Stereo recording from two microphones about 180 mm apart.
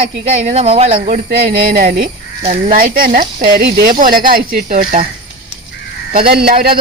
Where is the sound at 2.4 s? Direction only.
40° right (ahead or behind); by 4.8 s 55° right (ahead or behind).